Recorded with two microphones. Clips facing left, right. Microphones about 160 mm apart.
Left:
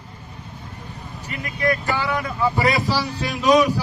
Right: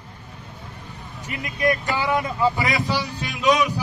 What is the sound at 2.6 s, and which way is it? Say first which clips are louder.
Speech: left 3 dB; 35° left (ahead or behind).